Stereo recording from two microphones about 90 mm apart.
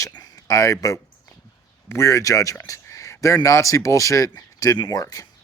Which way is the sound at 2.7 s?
35° left (ahead or behind).